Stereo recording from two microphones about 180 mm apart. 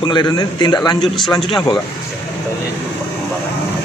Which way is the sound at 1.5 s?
20° left (ahead or behind).